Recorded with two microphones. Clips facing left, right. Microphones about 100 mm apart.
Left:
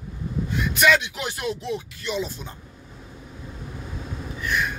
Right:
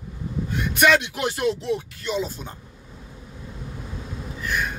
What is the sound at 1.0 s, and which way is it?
Speech, 65° right (ahead or behind).